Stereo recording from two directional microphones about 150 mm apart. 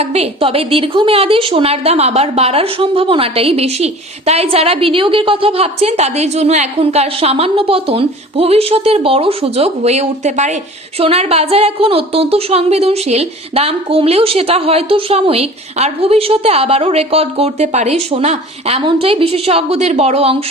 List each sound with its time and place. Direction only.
0.0 s a woman's voice: 45° right (ahead or behind)